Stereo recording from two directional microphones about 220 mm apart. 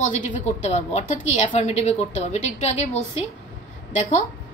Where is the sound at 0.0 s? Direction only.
35° left (ahead or behind).